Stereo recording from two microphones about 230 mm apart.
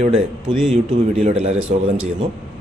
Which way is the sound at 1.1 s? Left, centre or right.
Right.